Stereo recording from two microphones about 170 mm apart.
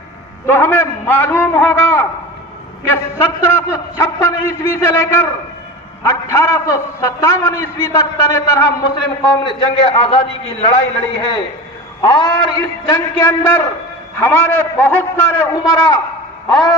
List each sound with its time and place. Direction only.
0.4 s a man's voice: 10° left (ahead or behind)
9.4 s a man's voice: 30° left (ahead or behind)